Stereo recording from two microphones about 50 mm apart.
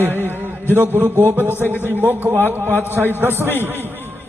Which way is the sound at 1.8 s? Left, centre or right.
Right.